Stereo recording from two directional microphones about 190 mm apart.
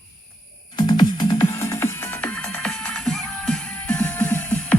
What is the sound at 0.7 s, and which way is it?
Music, 25° left (ahead or behind).